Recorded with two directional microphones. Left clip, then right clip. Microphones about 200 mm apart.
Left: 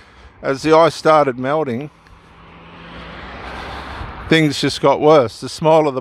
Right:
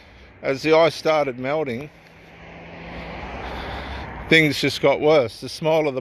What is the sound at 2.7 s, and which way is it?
Vehicle, 15° left (ahead or behind).